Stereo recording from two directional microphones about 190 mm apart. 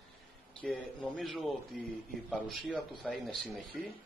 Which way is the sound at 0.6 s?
Centre (ahead or behind).